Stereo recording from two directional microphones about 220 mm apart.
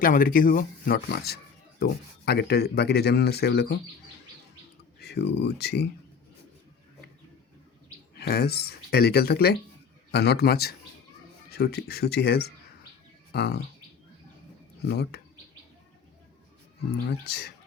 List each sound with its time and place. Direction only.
0.0 s speech: 40° left (ahead or behind)
4.9 s speech: 45° left (ahead or behind)
8.1 s speech: 50° left (ahead or behind)
14.8 s speech: 50° left (ahead or behind)
17.1 s speech: 50° left (ahead or behind)